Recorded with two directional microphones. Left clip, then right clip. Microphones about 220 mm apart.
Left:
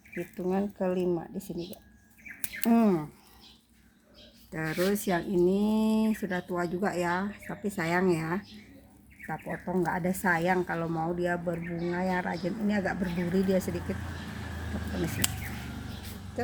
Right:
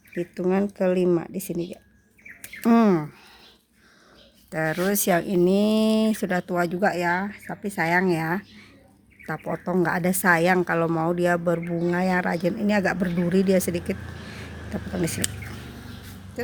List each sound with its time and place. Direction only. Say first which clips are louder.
0.1 s speech: right 7 dB; 45° right (ahead or behind)
2.6 s speech: right 6 dB; 45° right (ahead or behind)
4.5 s speech: right 5 dB; 40° right (ahead or behind)
9.5 s speech: right 7 dB; 45° right (ahead or behind)